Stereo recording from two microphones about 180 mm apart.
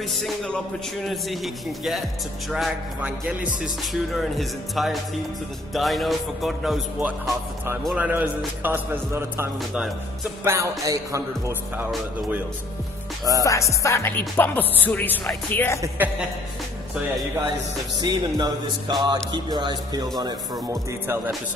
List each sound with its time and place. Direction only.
0.2 s music: 5° left (ahead or behind); by 11.8 s 15° right (ahead or behind)
13.4 s music: 15° left (ahead or behind)
18.0 s speech: 25° right (ahead or behind)